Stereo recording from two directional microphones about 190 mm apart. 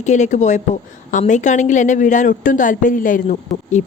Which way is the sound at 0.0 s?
40° left (ahead or behind).